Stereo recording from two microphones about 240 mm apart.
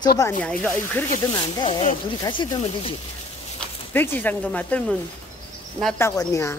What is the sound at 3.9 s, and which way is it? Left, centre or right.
Speech, centre.